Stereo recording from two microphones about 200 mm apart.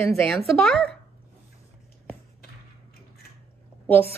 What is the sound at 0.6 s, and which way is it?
Speech, 5° left (ahead or behind).